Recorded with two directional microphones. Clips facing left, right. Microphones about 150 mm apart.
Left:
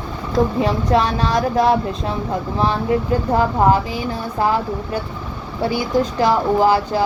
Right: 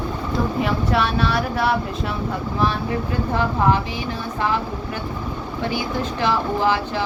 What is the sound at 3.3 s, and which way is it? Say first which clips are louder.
Speech: left 4 dB; 35° left (ahead or behind).